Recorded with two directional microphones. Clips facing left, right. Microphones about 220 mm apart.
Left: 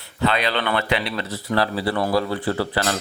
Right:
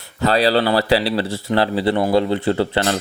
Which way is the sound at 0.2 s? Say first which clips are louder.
Right 6 dB; 35° right (ahead or behind).